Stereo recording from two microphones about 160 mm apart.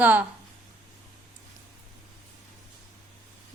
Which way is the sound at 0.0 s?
10° right (ahead or behind).